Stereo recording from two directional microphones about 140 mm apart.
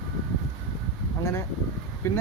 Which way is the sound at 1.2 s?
20° left (ahead or behind).